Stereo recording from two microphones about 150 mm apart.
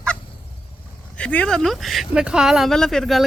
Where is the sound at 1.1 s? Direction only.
10° left (ahead or behind).